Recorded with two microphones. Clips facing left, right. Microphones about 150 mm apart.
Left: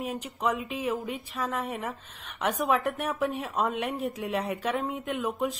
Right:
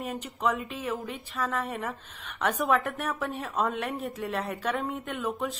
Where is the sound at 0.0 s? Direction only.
10° left (ahead or behind).